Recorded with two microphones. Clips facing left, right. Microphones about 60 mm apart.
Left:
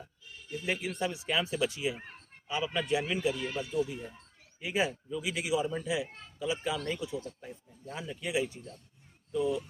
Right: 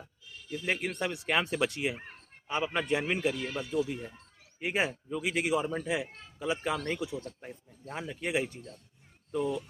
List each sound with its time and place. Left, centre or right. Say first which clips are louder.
0.6 s speech: right 1 dB; right
2.5 s speech: right 1 dB; right